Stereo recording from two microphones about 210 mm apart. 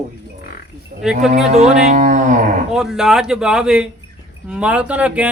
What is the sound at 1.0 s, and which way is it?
Speech, centre (ahead or behind).